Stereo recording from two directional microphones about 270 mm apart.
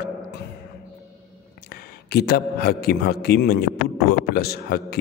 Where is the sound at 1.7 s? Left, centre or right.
Left.